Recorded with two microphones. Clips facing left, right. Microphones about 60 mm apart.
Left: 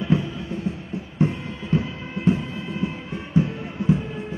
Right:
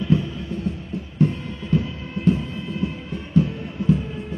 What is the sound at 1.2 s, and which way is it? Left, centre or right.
Music, left.